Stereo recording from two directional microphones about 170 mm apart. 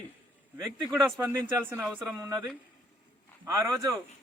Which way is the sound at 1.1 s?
15° right (ahead or behind).